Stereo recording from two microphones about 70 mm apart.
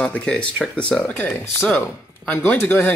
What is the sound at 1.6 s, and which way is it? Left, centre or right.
Speech, left.